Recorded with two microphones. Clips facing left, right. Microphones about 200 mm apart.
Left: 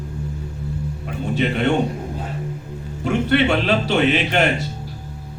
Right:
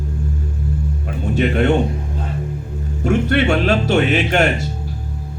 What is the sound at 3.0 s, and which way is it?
A man's voice, 45° right (ahead or behind).